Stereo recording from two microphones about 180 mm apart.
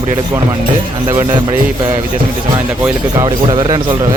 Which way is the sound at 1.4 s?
25° right (ahead or behind).